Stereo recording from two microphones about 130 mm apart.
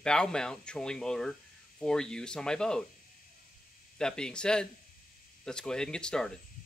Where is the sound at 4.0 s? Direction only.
5° left (ahead or behind).